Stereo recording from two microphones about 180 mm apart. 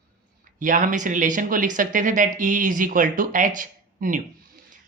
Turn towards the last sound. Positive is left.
turn(degrees=-50)  # may be behind; listen again after turning